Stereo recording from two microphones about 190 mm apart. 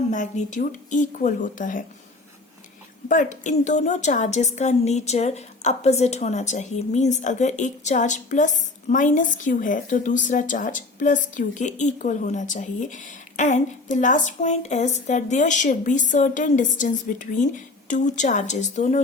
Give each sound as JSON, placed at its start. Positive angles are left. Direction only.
{"t": 0.1, "sound": "speech", "side_deg": 40}
{"t": 3.1, "sound": "a woman's voice", "side_deg": 40}